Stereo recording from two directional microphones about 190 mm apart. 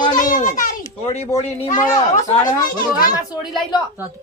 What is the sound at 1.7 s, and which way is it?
Speech, 15° left (ahead or behind).